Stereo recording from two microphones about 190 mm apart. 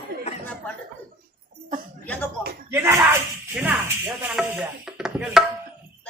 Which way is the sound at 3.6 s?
10° right (ahead or behind).